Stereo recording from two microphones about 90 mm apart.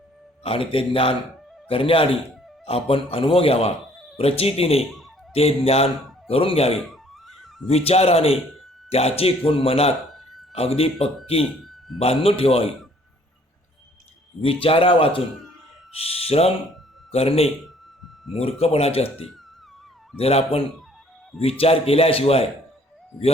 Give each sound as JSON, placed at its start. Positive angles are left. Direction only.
{"t": 0.4, "sound": "speech", "side_deg": 90}
{"t": 4.8, "sound": "speech", "side_deg": 0}
{"t": 5.3, "sound": "speech", "side_deg": 90}
{"t": 6.7, "sound": "music", "side_deg": 0}
{"t": 7.9, "sound": "speech", "side_deg": 90}
{"t": 10.1, "sound": "a sound", "side_deg": 0}
{"t": 10.6, "sound": "speech", "side_deg": 90}
{"t": 11.6, "sound": "a sound", "side_deg": 0}
{"t": 11.9, "sound": "speech", "side_deg": 90}
{"t": 14.4, "sound": "speech", "side_deg": 90}
{"t": 20.1, "sound": "speech", "side_deg": 90}